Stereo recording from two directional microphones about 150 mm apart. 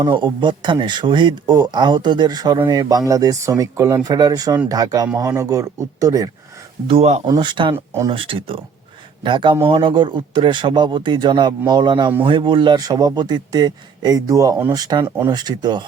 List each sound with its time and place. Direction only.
0.0 s a man's voice: 30° right (ahead or behind)
6.8 s speech: 40° right (ahead or behind)
7.3 s a man's voice: 30° right (ahead or behind)